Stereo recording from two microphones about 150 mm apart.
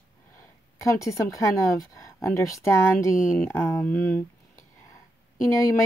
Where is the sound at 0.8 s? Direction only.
20° left (ahead or behind).